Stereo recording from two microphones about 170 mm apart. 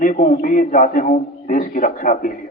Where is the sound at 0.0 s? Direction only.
50° left (ahead or behind).